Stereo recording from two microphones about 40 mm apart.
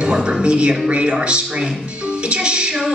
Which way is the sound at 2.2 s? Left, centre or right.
Right.